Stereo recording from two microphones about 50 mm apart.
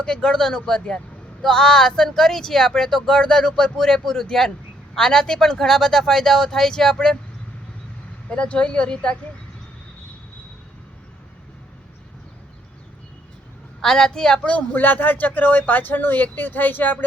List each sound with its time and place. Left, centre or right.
0.0 s speech: centre
8.3 s a woman's voice: left
13.8 s speech: centre
14.4 s a woman's voice: left
14.8 s speech: left